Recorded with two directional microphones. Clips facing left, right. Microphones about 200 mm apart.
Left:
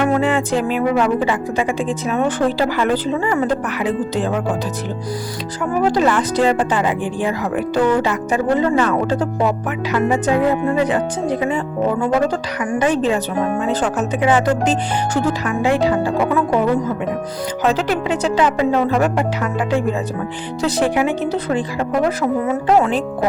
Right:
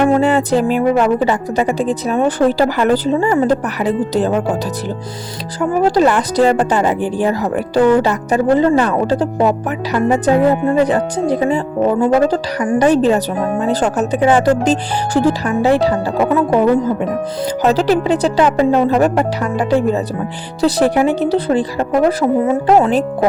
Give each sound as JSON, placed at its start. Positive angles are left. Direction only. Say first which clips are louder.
{"t": 0.0, "sound": "speech", "louder": "right 4 dB", "side_deg": -35}
{"t": 5.8, "sound": "speech", "louder": "right 3 dB", "side_deg": -40}
{"t": 17.6, "sound": "speech", "louder": "right 5 dB", "side_deg": -40}